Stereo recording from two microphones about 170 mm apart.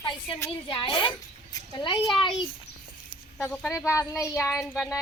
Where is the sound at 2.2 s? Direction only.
25° left (ahead or behind).